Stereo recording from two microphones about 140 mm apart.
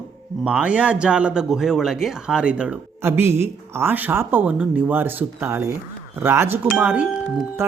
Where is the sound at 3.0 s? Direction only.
20° right (ahead or behind).